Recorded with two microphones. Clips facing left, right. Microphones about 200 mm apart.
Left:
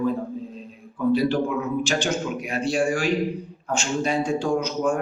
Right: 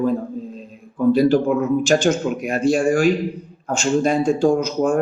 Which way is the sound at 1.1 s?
45° right (ahead or behind).